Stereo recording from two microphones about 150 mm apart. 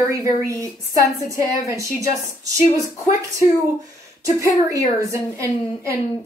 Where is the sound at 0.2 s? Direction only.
20° right (ahead or behind).